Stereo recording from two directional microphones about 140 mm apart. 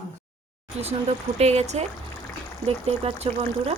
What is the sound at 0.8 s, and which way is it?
Speech, 50° right (ahead or behind).